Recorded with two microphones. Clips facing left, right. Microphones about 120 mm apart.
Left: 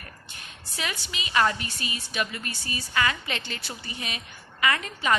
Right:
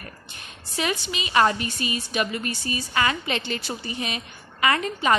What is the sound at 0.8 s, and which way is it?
A woman's voice, 20° right (ahead or behind).